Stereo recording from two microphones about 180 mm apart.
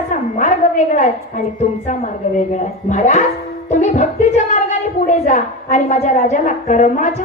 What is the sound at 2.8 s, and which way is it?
A woman's voice, 40° left (ahead or behind).